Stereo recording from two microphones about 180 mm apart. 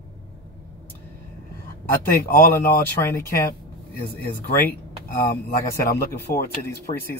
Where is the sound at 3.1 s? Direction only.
15° left (ahead or behind).